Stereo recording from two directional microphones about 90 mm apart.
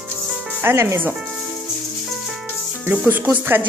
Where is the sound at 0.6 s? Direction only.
30° right (ahead or behind).